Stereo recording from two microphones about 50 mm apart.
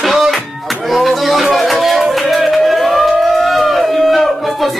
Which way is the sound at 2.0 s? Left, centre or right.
Centre.